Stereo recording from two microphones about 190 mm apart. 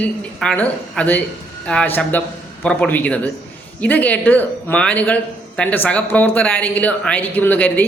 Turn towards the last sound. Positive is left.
turn(degrees=10)  # may be behind; listen again after turning